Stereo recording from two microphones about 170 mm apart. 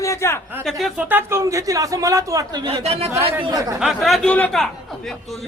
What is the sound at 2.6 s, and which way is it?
Speech, 35° right (ahead or behind).